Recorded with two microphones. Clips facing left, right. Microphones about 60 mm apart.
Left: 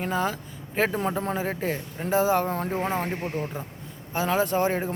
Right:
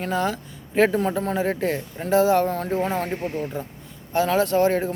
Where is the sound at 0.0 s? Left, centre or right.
Centre.